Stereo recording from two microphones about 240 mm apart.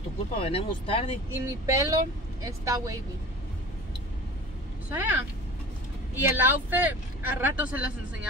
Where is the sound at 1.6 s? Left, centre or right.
Centre.